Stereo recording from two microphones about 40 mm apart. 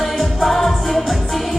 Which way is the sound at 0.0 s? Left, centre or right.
Centre.